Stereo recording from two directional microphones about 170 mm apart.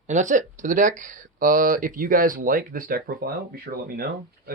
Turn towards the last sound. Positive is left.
turn(degrees=-65)  # may be behind; listen again after turning